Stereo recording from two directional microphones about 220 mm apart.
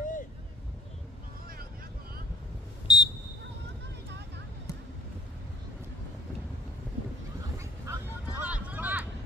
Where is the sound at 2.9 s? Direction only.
20° left (ahead or behind).